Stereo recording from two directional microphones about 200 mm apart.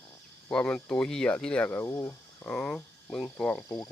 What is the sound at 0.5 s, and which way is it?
Speech, 5° left (ahead or behind).